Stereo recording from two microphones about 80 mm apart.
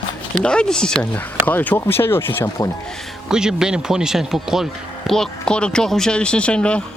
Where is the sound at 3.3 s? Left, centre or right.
Centre.